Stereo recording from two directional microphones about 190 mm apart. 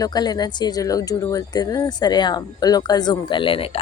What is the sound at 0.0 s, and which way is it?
Speech, 20° left (ahead or behind).